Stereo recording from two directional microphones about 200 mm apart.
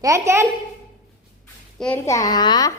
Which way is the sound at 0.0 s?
15° right (ahead or behind).